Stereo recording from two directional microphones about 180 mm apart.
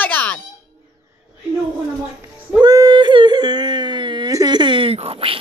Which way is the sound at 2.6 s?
20° right (ahead or behind).